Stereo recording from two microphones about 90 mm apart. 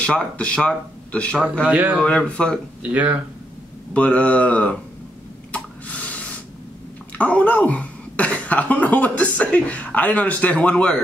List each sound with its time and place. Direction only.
0.0 s speech: 10° left (ahead or behind)
1.7 s a man's voice: 15° right (ahead or behind)
2.0 s speech: 10° left (ahead or behind)
2.8 s a man's voice: 15° right (ahead or behind)
3.9 s speech: 15° left (ahead or behind)
5.5 s a sound: 15° left (ahead or behind)
7.2 s speech: 15° left (ahead or behind)